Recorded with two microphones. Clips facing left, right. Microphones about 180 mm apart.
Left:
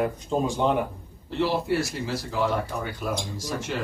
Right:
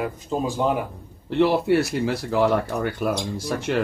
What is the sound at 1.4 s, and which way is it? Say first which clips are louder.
Speech: right 6 dB; 65° right (ahead or behind).